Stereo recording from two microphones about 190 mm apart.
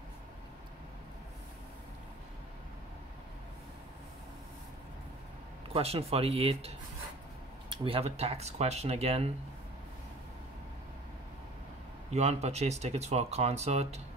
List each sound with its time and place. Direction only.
5.7 s speech: 30° right (ahead or behind)
7.7 s speech: 30° right (ahead or behind)
12.1 s speech: 35° right (ahead or behind)